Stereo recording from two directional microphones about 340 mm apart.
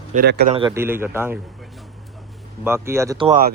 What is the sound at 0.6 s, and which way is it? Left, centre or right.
Speech, centre.